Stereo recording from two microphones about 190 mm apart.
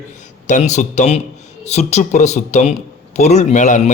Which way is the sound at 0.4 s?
40° left (ahead or behind).